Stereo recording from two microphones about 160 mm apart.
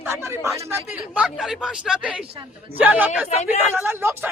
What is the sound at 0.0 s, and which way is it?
Speech, 15° right (ahead or behind).